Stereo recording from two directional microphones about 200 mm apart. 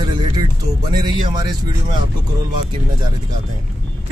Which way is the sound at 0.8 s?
20° right (ahead or behind).